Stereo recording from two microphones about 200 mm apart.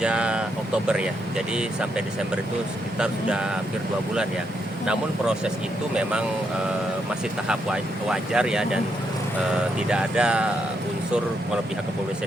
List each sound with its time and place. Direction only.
0.0 s vehicle: 5° right (ahead or behind)
0.9 s speech: 5° right (ahead or behind)
4.9 s speech: 5° right (ahead or behind)
7.4 s speech: 5° right (ahead or behind)